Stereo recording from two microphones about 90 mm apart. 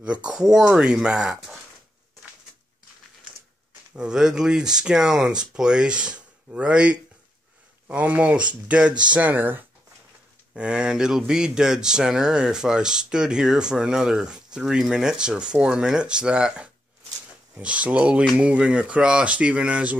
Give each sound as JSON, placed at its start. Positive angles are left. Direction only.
{"t": 0.0, "sound": "speech", "side_deg": -10}
{"t": 3.9, "sound": "speech", "side_deg": -10}
{"t": 10.5, "sound": "speech", "side_deg": -10}